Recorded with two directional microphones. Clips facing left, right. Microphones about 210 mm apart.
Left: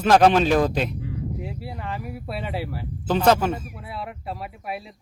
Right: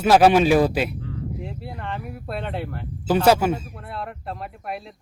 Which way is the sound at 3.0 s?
10° right (ahead or behind).